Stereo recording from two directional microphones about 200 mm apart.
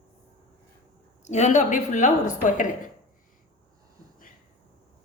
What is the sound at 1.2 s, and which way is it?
A woman's voice, 35° left (ahead or behind).